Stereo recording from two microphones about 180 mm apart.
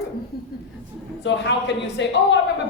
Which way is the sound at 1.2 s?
80° left.